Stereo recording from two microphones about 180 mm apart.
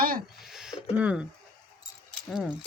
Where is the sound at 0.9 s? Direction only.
5° right (ahead or behind).